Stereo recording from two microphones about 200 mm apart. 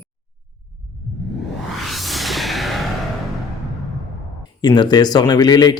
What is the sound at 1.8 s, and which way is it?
Music, centre (ahead or behind).